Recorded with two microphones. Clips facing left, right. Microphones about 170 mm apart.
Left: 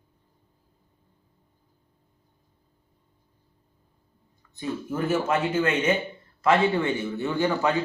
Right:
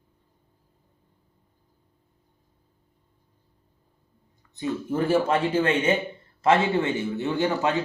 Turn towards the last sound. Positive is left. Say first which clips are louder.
# even
turn(degrees=-20)  # may be behind; listen again after turning